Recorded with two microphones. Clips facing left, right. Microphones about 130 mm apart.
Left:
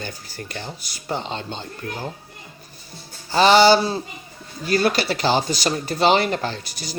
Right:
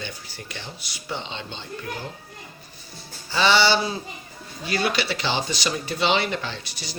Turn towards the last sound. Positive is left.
turn(degrees=45)  # may be behind; listen again after turning